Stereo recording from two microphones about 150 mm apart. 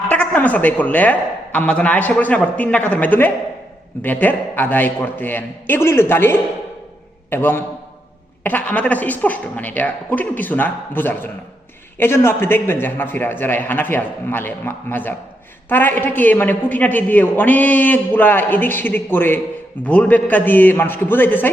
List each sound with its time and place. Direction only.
0.1 s a woman's voice: 10° left (ahead or behind)